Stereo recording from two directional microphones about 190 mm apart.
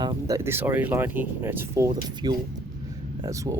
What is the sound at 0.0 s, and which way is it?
Speech, 20° right (ahead or behind).